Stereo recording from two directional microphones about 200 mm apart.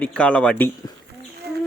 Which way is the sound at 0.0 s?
5° left (ahead or behind).